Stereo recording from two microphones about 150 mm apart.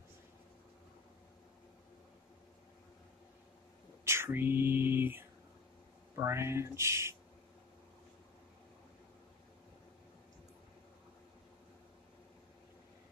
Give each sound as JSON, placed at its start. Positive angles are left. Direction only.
{"t": 4.0, "sound": "whispering", "side_deg": -15}
{"t": 6.1, "sound": "speech", "side_deg": -20}